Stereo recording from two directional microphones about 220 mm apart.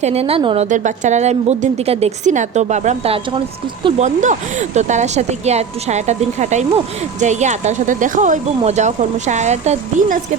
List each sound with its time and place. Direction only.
0.0 s a woman's voice: 30° right (ahead or behind)